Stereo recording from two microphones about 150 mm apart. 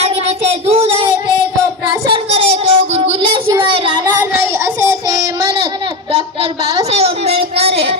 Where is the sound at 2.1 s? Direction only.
40° right (ahead or behind).